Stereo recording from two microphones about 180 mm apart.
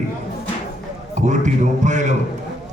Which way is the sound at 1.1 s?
40° right (ahead or behind).